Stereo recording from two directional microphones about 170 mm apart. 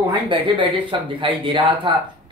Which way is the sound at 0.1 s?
30° right (ahead or behind).